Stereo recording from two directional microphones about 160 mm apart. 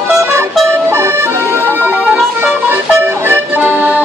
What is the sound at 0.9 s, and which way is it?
Music, 15° right (ahead or behind).